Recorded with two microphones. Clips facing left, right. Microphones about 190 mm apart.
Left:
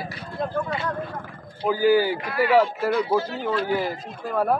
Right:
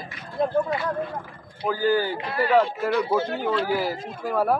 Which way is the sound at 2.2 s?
30° right (ahead or behind).